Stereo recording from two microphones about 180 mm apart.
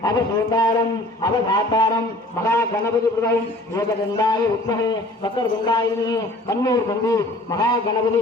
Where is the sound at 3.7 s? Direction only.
20° left (ahead or behind).